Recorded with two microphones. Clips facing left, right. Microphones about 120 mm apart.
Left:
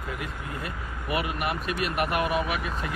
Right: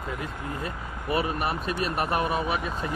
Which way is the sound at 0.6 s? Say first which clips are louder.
Right 2 dB; 30° right (ahead or behind).